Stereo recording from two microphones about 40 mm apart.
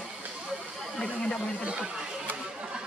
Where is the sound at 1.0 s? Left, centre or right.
Left.